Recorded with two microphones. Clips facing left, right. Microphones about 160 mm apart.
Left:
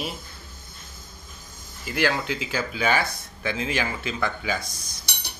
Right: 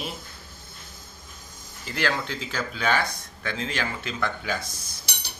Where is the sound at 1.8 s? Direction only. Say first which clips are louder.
Left 3 dB; 10° left (ahead or behind).